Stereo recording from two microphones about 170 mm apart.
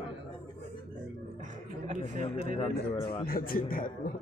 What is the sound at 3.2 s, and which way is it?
Speech, 60° left (ahead or behind).